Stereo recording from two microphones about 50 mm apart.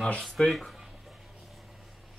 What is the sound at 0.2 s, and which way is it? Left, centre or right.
Speech, centre.